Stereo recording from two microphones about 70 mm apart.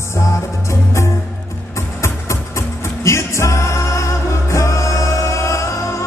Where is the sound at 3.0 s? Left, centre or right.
Left.